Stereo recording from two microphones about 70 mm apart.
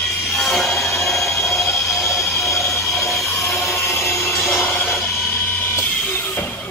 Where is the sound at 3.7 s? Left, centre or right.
Left.